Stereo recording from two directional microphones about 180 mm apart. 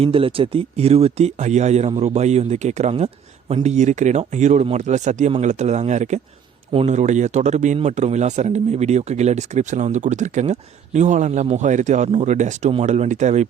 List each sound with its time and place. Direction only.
0.0 s speech: 30° right (ahead or behind)